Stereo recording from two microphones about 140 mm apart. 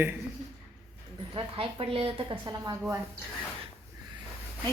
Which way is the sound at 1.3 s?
35° right (ahead or behind).